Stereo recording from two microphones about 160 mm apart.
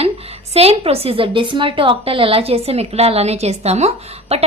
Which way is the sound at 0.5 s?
40° right (ahead or behind).